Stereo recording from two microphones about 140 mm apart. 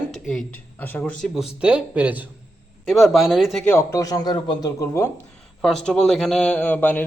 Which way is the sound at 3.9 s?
25° left (ahead or behind).